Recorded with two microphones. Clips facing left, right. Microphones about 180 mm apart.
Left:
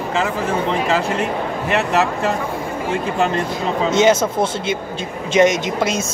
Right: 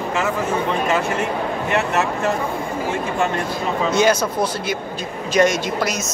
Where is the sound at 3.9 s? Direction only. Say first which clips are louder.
Left 3 dB; 25° left (ahead or behind).